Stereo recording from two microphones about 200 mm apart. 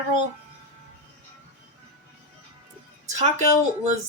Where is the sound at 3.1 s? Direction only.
35° right (ahead or behind).